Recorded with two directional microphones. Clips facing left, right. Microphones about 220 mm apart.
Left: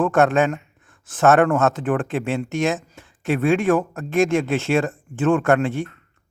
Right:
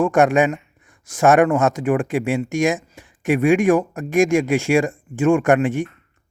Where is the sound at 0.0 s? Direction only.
10° right (ahead or behind).